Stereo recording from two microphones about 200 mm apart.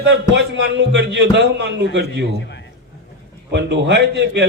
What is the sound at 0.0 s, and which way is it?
A man's voice, 60° right (ahead or behind).